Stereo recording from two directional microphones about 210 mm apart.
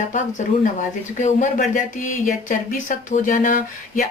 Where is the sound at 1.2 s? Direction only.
35° left (ahead or behind).